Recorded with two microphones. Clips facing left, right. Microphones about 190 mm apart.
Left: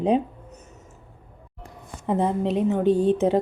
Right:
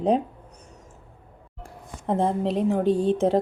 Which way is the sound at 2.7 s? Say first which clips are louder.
Left 3 dB; 30° right (ahead or behind).